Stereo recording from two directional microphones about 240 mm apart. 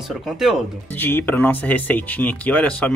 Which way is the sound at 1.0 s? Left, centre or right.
Centre.